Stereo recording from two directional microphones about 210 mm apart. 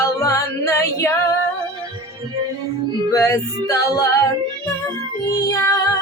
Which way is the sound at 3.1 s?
15° left (ahead or behind).